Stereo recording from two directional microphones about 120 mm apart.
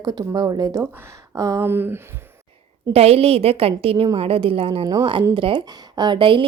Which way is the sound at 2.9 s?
60° right (ahead or behind).